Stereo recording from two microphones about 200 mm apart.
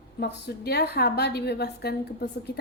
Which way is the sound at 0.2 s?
55° left (ahead or behind).